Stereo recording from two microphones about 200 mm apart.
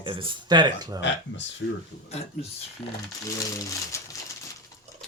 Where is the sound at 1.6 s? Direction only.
75° left (ahead or behind).